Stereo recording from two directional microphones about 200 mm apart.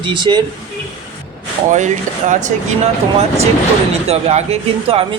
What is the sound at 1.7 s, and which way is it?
Speech, 40° right (ahead or behind).